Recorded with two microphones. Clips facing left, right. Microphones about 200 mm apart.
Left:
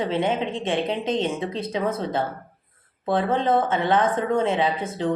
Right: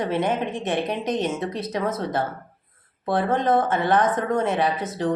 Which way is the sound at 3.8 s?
25° left (ahead or behind).